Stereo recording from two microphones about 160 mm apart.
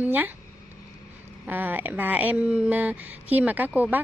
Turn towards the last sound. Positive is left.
turn(degrees=-10)  # may be behind; listen again after turning